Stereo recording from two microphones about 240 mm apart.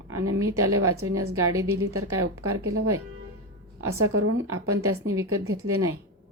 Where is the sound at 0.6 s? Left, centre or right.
Right.